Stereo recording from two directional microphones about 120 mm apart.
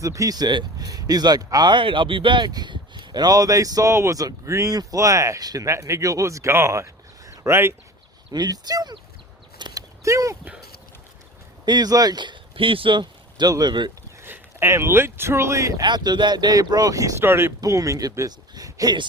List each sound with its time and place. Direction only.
0.0 s speech: 25° right (ahead or behind)
8.3 s speech: 35° right (ahead or behind)
9.6 s a sound: 40° right (ahead or behind)
10.0 s speech: 25° right (ahead or behind)
11.6 s speech: 35° right (ahead or behind)
14.2 s speech: 20° right (ahead or behind)
15.8 s speech: 40° right (ahead or behind)